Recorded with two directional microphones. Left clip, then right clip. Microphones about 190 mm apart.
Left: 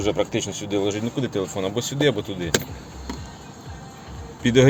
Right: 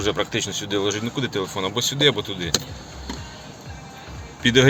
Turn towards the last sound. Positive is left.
turn(degrees=10)  # may be behind; listen again after turning